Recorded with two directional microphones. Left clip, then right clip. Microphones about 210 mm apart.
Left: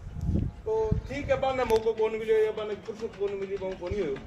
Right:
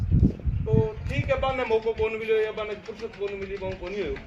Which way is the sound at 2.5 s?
55° left (ahead or behind).